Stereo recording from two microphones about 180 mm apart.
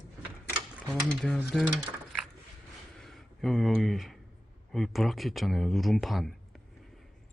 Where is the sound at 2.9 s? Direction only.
Centre (ahead or behind).